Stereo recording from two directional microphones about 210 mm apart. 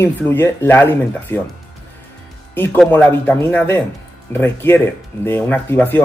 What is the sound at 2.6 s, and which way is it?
Speech, 10° left (ahead or behind).